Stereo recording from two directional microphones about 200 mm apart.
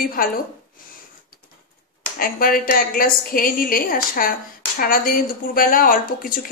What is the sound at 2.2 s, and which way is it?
Speech, 45° left (ahead or behind).